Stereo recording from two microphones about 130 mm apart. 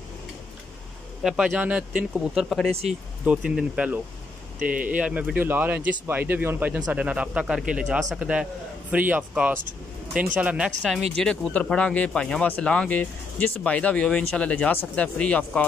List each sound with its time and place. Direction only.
1.2 s speech: 5° right (ahead or behind)
2.7 s speech: 50° right (ahead or behind)
3.3 s speech: 5° right (ahead or behind)
11.1 s speech: 10° left (ahead or behind)